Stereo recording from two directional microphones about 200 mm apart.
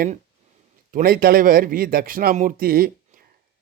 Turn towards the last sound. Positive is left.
turn(degrees=-45)  # may be behind; listen again after turning